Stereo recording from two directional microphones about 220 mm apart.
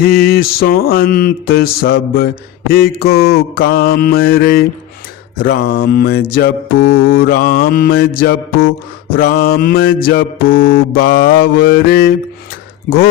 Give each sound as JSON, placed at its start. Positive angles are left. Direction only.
{"t": 0.0, "sound": "mantra", "side_deg": 45}
{"t": 10.5, "sound": "mantra", "side_deg": 65}
{"t": 10.9, "sound": "mantra", "side_deg": 40}